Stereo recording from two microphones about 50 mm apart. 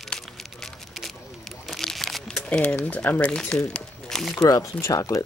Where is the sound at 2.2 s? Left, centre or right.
Centre.